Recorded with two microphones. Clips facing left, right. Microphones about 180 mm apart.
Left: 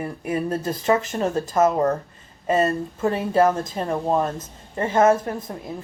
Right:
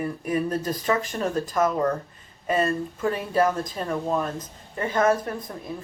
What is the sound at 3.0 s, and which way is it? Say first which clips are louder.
Speech: left 4 dB; 25° left (ahead or behind).